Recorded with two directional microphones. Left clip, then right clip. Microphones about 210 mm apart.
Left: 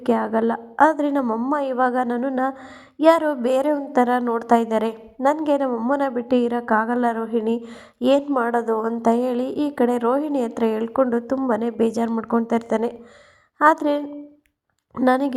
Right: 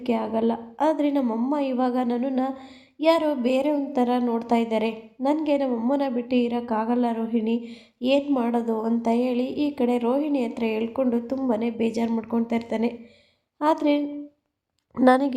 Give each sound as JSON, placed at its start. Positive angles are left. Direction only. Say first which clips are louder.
{"t": 0.0, "sound": "a woman's voice", "louder": "left 4 dB", "side_deg": 25}
{"t": 14.9, "sound": "speech", "louder": "even", "side_deg": 0}